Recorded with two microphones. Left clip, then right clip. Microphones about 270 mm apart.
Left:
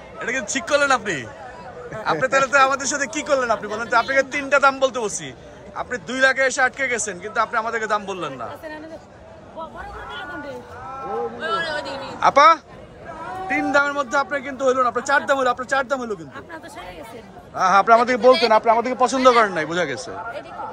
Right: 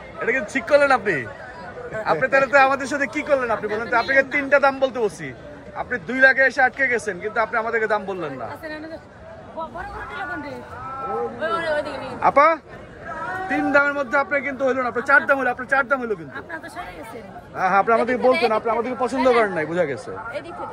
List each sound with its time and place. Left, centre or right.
0.2 s a man's voice: centre
11.3 s speech: centre
12.2 s a man's voice: centre